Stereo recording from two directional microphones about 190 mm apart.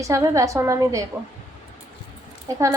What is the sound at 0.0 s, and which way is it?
A woman's voice, 15° right (ahead or behind).